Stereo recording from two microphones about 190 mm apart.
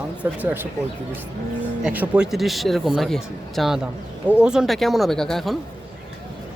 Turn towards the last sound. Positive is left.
turn(degrees=0)  # may be behind; listen again after turning